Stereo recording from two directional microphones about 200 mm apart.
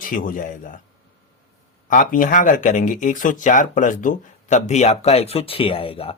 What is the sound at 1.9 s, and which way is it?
Speech, 40° left (ahead or behind).